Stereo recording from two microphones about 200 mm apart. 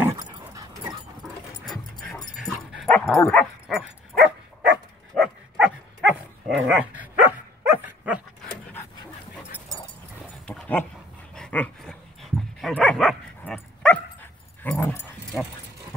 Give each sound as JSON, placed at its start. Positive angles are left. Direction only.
{"t": 0.0, "sound": "dog", "side_deg": -15}
{"t": 2.3, "sound": "dog", "side_deg": 0}
{"t": 3.6, "sound": "dog", "side_deg": 0}
{"t": 10.4, "sound": "dog", "side_deg": 5}